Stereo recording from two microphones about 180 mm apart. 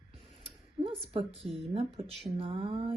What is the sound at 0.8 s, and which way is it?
Speech, 30° right (ahead or behind).